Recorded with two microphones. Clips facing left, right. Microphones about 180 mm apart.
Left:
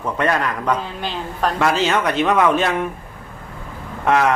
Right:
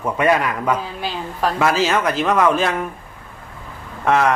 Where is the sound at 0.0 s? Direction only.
10° right (ahead or behind).